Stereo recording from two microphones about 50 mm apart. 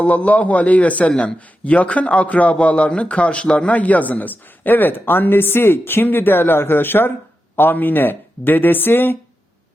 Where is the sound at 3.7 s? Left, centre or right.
Left.